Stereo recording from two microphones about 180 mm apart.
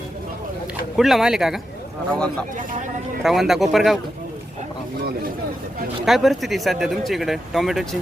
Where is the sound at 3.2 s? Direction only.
Centre (ahead or behind).